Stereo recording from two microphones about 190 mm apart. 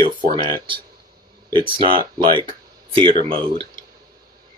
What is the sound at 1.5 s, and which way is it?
Speech, 25° right (ahead or behind).